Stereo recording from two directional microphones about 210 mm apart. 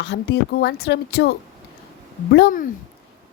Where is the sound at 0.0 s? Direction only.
55° left (ahead or behind).